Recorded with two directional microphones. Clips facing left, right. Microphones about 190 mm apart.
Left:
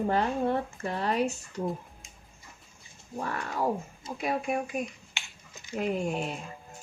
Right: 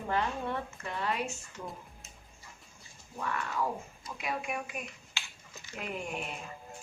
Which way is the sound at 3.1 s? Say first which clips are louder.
Left 2 dB; 40° left (ahead or behind).